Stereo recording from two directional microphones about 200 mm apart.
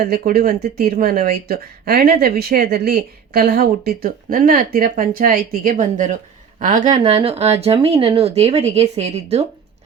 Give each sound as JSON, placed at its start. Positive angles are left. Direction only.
{"t": 0.1, "sound": "speech", "side_deg": -45}